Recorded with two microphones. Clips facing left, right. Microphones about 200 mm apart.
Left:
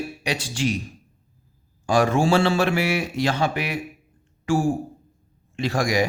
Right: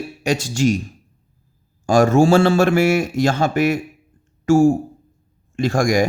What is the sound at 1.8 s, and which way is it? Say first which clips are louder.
Speech: right 6 dB; 45° right (ahead or behind).